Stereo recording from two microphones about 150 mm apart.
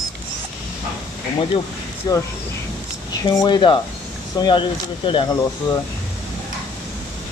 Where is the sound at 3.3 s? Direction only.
25° left (ahead or behind).